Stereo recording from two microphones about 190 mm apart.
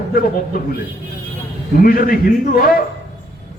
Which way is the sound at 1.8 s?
50° left (ahead or behind).